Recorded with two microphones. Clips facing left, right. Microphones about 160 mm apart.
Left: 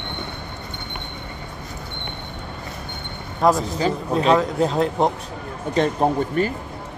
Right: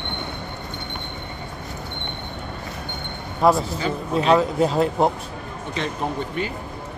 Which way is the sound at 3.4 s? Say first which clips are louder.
Even; centre (ahead or behind).